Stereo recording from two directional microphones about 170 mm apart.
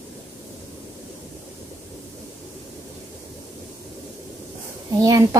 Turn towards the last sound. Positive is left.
turn(degrees=-20)  # may be behind; listen again after turning